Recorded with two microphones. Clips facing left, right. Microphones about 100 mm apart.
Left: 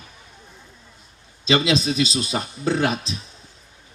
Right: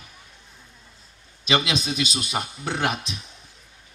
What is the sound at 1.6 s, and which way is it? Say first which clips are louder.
Speech: left 6 dB; 30° left (ahead or behind).